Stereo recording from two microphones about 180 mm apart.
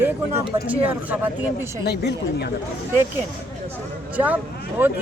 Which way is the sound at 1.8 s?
65° left (ahead or behind).